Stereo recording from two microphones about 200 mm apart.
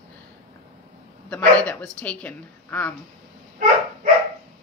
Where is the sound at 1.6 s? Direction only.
5° left (ahead or behind).